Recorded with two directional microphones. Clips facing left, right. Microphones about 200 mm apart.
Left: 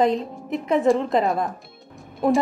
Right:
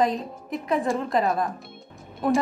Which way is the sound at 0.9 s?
Centre (ahead or behind).